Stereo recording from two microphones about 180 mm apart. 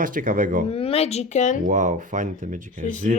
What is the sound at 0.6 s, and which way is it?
Speech, 35° left (ahead or behind).